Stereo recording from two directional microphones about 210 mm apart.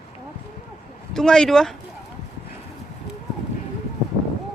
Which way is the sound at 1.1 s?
Centre (ahead or behind).